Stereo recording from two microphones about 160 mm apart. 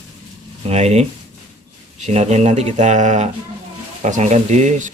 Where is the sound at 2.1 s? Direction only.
45° right (ahead or behind).